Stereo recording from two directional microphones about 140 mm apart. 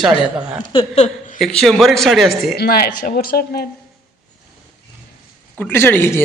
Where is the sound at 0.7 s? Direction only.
55° left (ahead or behind).